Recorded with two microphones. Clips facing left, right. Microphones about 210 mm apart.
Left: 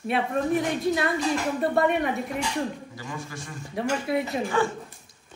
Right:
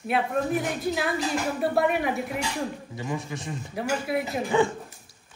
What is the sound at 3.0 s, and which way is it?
Speech, 20° right (ahead or behind).